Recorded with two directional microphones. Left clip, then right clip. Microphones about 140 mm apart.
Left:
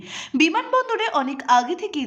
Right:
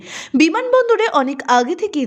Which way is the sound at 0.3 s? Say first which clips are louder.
Right 5 dB; 35° right (ahead or behind).